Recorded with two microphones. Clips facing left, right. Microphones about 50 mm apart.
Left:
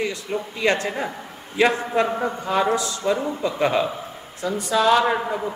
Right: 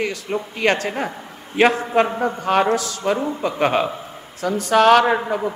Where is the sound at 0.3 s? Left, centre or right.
Right.